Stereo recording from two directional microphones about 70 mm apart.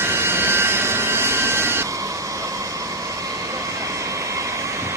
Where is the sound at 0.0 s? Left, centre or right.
Right.